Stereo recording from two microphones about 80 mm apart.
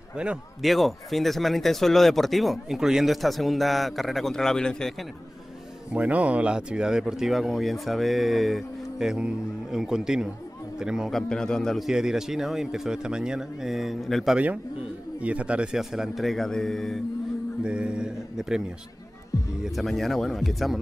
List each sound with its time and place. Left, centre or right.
0.1 s a man's voice: centre
0.6 s speech: centre
5.9 s speech: centre
11.1 s a man's voice: centre
11.9 s speech: centre
14.3 s a man's voice: centre
17.6 s speech: centre